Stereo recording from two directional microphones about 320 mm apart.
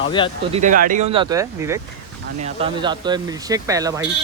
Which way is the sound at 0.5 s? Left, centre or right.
Right.